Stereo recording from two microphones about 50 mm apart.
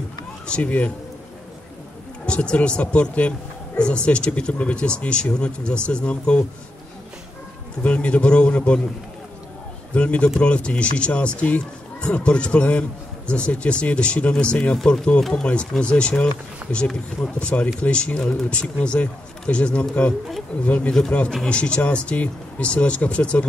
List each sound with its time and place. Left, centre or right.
0.5 s speech: left
2.2 s speech: left
7.8 s speech: left
9.9 s speech: left
15.1 s speech: centre
15.4 s speech: left